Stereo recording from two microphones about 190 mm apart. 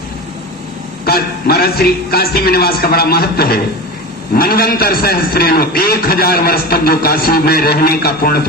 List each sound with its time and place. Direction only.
1.0 s a man's voice: 55° left (ahead or behind)